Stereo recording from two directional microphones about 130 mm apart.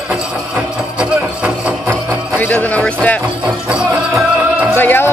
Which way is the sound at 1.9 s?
15° left (ahead or behind).